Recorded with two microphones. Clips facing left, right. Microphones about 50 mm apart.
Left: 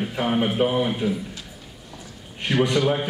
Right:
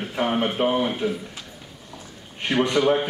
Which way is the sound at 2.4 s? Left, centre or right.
Centre.